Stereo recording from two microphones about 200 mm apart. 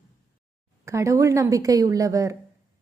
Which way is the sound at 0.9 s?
15° right (ahead or behind).